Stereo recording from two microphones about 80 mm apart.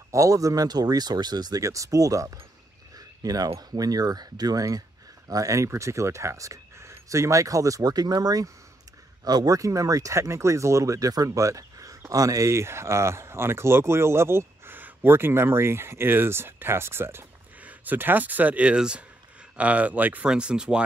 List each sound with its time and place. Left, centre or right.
0.1 s speech: right; by 20.8 s centre